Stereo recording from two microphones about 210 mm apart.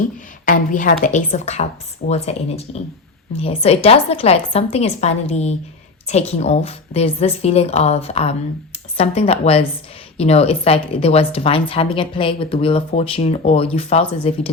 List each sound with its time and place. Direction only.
0.4 s a woman's voice: 40° left (ahead or behind)